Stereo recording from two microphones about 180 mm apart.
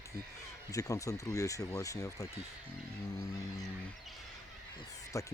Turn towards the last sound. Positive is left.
turn(degrees=15)  # may be behind; listen again after turning